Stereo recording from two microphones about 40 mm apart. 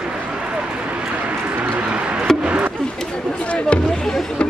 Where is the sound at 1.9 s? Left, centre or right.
Right.